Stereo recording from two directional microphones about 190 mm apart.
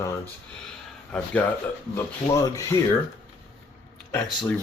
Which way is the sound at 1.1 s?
5° left (ahead or behind).